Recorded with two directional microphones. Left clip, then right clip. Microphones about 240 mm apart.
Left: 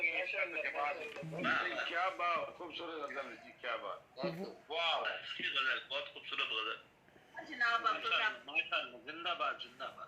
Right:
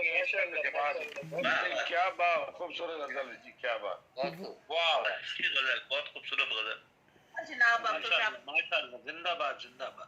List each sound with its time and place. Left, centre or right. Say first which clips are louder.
0.0 s speech: right 6 dB; right